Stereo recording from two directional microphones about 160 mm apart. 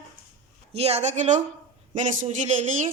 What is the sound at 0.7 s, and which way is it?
A woman's voice, 40° right (ahead or behind).